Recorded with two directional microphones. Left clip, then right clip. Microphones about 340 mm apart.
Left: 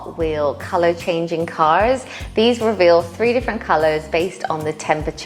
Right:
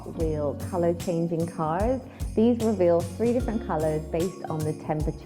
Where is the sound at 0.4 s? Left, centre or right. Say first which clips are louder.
Left 10 dB; centre.